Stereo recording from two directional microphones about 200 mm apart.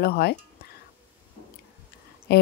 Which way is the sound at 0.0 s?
50° left (ahead or behind).